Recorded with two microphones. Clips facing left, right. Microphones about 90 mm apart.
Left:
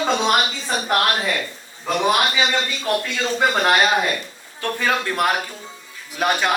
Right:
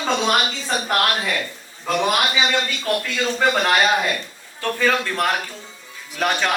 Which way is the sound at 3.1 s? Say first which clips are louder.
Right 2 dB; 15° left (ahead or behind).